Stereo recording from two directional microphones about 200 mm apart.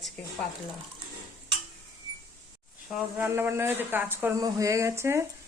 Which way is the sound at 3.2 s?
10° right (ahead or behind).